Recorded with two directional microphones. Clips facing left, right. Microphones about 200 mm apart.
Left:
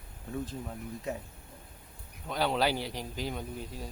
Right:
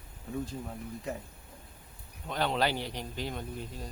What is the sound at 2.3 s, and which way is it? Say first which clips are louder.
Speech: left 1 dB; 5° left (ahead or behind).